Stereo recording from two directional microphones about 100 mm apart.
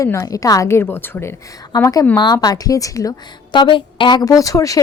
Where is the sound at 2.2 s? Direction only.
45° left (ahead or behind).